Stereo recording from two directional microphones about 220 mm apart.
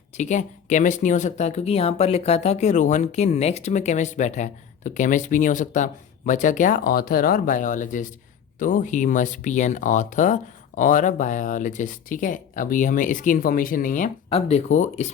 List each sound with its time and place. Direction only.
0.2 s speech: 35° left (ahead or behind)